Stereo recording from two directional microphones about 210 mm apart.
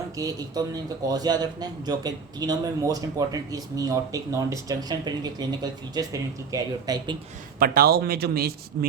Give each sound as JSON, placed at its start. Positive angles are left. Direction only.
{"t": 0.2, "sound": "a man's voice", "side_deg": -15}
{"t": 7.6, "sound": "speech", "side_deg": -45}